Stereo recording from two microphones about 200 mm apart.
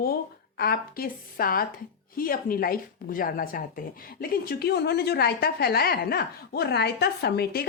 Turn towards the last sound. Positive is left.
turn(degrees=50)  # may be behind; listen again after turning